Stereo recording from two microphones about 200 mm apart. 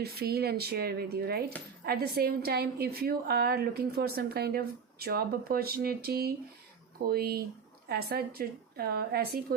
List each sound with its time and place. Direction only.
0.0 s a woman's voice: 50° right (ahead or behind)